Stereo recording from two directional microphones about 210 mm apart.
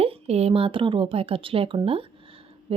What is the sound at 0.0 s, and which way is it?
Speech, 30° right (ahead or behind).